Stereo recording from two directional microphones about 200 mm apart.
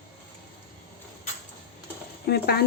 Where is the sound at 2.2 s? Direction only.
55° left (ahead or behind).